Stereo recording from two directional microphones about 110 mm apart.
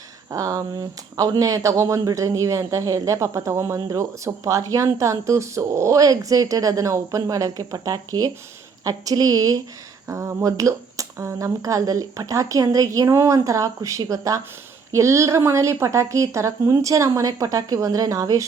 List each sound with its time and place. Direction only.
0.3 s a woman's voice: 30° right (ahead or behind)